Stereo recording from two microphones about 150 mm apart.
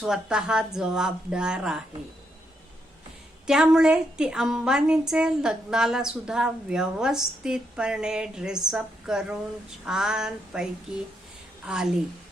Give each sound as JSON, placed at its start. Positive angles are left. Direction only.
{"t": 0.0, "sound": "a woman's voice", "side_deg": -5}
{"t": 3.4, "sound": "a woman's voice", "side_deg": -5}